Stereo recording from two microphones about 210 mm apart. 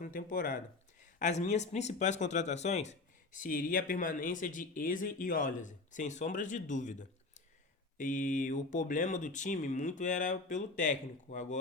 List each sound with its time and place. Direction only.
0.0 s speech: 40° left (ahead or behind)